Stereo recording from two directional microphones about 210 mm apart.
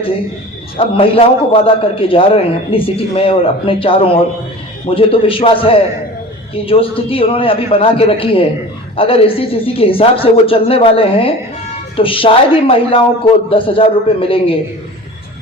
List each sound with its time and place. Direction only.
0.8 s a man's voice: 25° left (ahead or behind)